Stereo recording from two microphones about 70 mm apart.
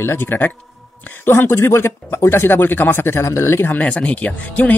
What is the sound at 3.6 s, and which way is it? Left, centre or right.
Speech, left.